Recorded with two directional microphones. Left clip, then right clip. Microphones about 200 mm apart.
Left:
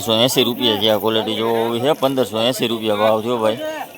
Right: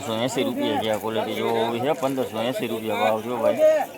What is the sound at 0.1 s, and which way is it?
Speech, 25° left (ahead or behind).